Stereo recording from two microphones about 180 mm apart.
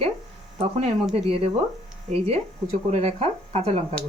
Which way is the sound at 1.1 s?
30° right (ahead or behind).